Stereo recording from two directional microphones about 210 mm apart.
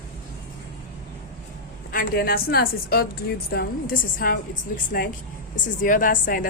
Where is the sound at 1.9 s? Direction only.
45° left (ahead or behind).